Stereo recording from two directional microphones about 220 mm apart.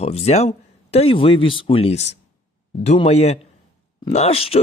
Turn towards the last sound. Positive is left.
turn(degrees=25)  # may be behind; listen again after turning